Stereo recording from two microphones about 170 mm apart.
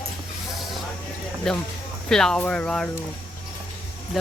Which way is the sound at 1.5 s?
5° left (ahead or behind).